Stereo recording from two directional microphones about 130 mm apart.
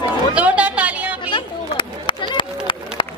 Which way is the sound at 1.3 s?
40° left (ahead or behind).